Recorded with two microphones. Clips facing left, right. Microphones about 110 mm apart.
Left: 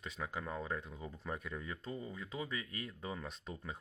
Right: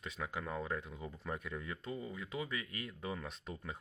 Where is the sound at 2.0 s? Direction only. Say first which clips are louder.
Right 1 dB; 30° left (ahead or behind).